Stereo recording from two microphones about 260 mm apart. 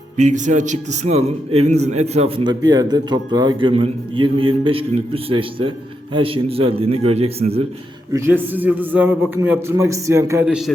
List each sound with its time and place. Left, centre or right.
0.2 s a man's voice: right
8.1 s a man's voice: centre